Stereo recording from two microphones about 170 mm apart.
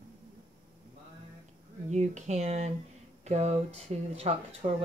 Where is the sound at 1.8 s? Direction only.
45° right (ahead or behind).